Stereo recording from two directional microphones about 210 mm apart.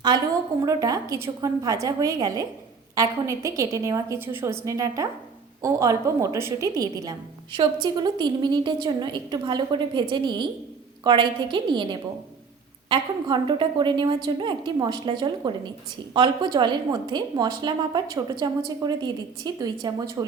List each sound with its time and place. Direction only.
0.6 s a woman's voice: 15° right (ahead or behind)